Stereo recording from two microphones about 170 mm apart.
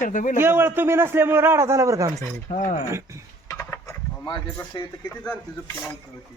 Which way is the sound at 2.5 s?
40° left (ahead or behind).